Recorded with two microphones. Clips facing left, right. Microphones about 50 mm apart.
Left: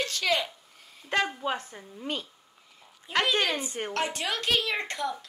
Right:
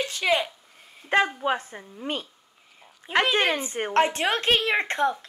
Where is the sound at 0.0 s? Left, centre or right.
Centre.